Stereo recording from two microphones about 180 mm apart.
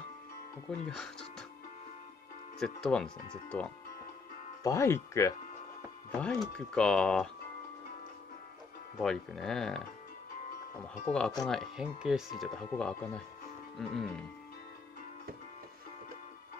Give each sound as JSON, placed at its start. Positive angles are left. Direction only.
{"t": 0.7, "sound": "speech", "side_deg": 0}
{"t": 2.6, "sound": "speech", "side_deg": 5}
{"t": 4.6, "sound": "speech", "side_deg": 15}
{"t": 6.2, "sound": "speech", "side_deg": 5}
{"t": 8.9, "sound": "speech", "side_deg": 5}
{"t": 11.1, "sound": "speech", "side_deg": 5}